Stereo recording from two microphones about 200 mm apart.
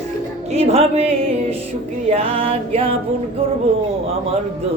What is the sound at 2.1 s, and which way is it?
Mantra, 30° right (ahead or behind).